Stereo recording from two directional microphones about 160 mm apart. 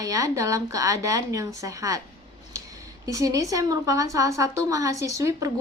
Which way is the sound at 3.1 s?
20° right (ahead or behind).